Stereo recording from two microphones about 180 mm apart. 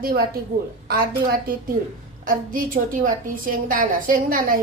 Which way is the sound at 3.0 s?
50° right (ahead or behind).